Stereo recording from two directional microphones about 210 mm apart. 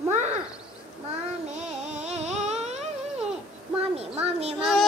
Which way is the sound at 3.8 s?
30° right (ahead or behind).